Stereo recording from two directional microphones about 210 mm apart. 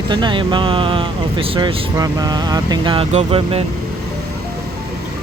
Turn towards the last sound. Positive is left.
turn(degrees=-30)  # may be behind; listen again after turning